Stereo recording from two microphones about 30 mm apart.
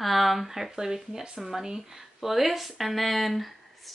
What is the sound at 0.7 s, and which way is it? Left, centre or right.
Speech, centre.